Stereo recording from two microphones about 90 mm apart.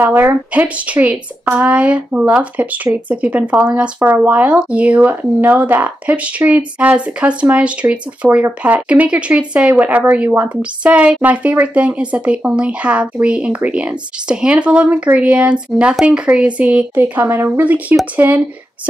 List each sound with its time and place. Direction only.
0.0 s speech: 25° right (ahead or behind)